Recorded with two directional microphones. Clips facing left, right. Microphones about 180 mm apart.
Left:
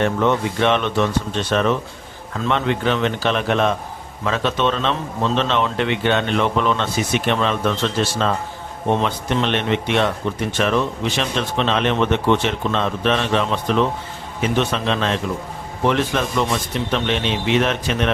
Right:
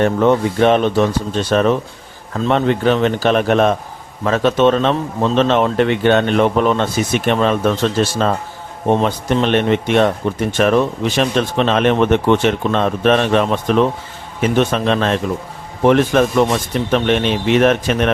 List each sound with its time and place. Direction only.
0.0 s speech: 40° right (ahead or behind)